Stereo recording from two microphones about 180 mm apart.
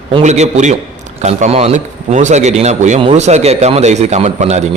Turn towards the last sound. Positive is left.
turn(degrees=-40)  # may be behind; listen again after turning